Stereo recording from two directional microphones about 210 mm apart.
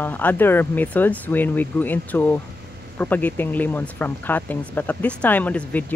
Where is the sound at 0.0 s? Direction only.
10° left (ahead or behind).